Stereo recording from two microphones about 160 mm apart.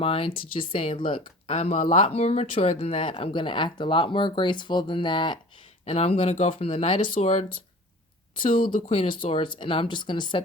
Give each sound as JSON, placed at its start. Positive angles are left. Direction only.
{"t": 0.0, "sound": "speech", "side_deg": 35}
{"t": 5.8, "sound": "speech", "side_deg": 40}
{"t": 8.4, "sound": "speech", "side_deg": 30}